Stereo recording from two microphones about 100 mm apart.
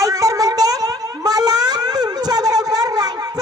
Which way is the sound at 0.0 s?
35° right (ahead or behind).